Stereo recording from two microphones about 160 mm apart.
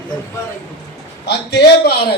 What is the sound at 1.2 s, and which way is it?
Speech, 90° left.